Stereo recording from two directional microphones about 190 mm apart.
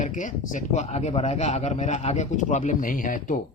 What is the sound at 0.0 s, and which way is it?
A man's voice, 40° left (ahead or behind).